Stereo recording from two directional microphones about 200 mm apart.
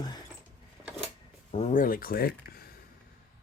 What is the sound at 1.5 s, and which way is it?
Speech, 35° left (ahead or behind).